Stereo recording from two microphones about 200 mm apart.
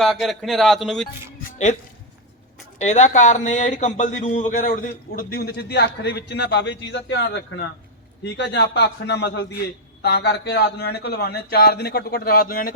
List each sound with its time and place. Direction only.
0.0 s a man's voice: centre (ahead or behind)
1.5 s music: 35° left (ahead or behind)
2.7 s a man's voice: 35° left (ahead or behind)